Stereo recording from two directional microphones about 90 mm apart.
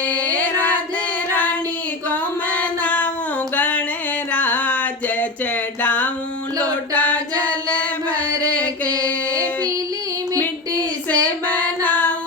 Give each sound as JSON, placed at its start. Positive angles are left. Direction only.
{"t": 0.0, "sound": "music", "side_deg": 15}
{"t": 2.0, "sound": "female singing", "side_deg": 15}
{"t": 3.5, "sound": "music", "side_deg": 15}
{"t": 5.8, "sound": "a sound", "side_deg": 15}
{"t": 7.7, "sound": "chant", "side_deg": 15}
{"t": 8.6, "sound": "female singing", "side_deg": 15}
{"t": 11.1, "sound": "female singing", "side_deg": 15}